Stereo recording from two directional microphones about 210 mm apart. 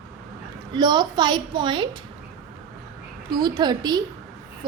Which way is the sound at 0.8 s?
20° right (ahead or behind).